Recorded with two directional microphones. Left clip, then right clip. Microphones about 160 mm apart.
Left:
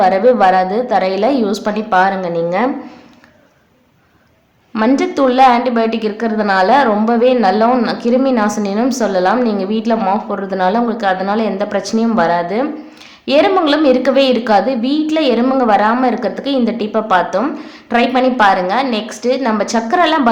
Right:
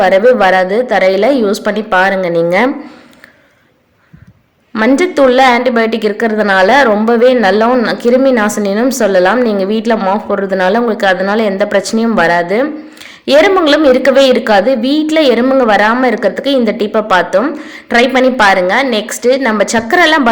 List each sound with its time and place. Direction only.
0.0 s a woman's voice: 15° right (ahead or behind)
2.3 s speech: 30° right (ahead or behind)
4.7 s a woman's voice: 15° right (ahead or behind)